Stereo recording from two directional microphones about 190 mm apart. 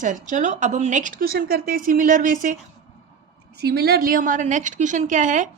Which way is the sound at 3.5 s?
55° right (ahead or behind).